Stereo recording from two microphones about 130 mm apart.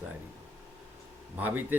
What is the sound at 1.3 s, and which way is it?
Speech, 15° right (ahead or behind).